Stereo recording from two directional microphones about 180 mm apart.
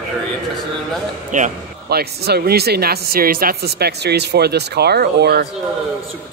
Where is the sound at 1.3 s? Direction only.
45° right (ahead or behind).